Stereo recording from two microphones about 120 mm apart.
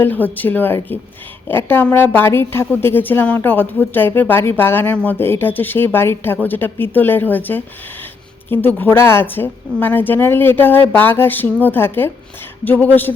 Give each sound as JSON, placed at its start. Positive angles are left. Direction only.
{"t": 0.0, "sound": "a woman's voice", "side_deg": 15}